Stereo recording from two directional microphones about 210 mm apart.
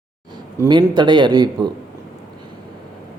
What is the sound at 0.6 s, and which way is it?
A man's voice, 20° right (ahead or behind).